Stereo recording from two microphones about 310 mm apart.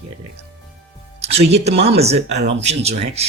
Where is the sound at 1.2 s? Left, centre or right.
Centre.